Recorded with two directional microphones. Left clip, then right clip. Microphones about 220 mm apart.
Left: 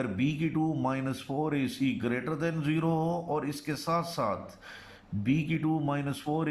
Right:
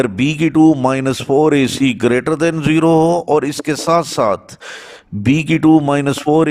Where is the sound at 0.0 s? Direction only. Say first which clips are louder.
Right 16 dB; 50° right (ahead or behind).